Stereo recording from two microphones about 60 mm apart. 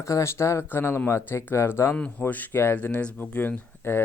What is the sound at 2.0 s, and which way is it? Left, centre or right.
Speech, left.